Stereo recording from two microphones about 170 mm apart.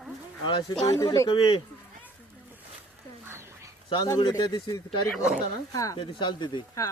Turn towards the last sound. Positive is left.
turn(degrees=25)  # may be behind; listen again after turning